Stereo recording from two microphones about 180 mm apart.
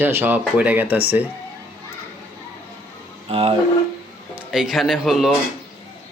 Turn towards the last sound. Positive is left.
turn(degrees=0)  # may be behind; listen again after turning